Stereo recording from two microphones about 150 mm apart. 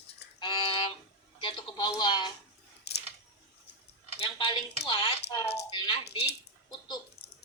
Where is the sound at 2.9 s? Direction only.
90° left.